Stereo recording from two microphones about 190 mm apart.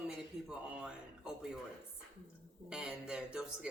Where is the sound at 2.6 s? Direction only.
5° right (ahead or behind).